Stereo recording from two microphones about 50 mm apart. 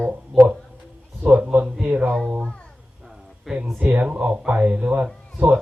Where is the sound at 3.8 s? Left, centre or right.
Right.